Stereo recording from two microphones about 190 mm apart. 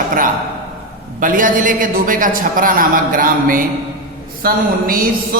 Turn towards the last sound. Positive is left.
turn(degrees=-50)  # may be behind; listen again after turning